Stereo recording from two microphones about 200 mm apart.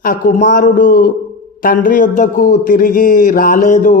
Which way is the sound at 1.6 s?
45° left (ahead or behind).